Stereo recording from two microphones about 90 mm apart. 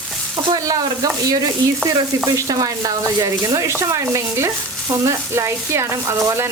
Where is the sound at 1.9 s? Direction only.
40° right (ahead or behind).